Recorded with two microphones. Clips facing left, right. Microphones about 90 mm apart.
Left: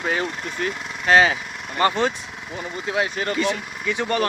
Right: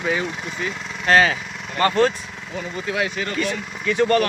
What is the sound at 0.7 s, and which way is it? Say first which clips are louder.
Vehicle: even; 5° left (ahead or behind).